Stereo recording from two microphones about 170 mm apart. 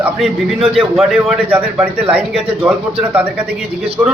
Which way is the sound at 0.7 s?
Centre (ahead or behind).